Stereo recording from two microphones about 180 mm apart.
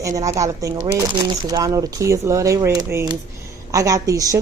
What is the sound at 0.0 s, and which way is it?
A woman's voice, 15° right (ahead or behind).